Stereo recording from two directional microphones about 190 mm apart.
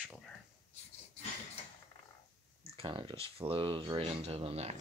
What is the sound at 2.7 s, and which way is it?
Speech, 25° right (ahead or behind).